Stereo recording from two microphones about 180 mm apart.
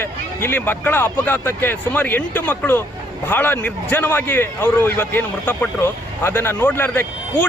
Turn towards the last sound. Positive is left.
turn(degrees=10)  # may be behind; listen again after turning